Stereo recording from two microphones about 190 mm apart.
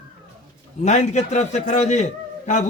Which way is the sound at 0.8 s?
35° left (ahead or behind).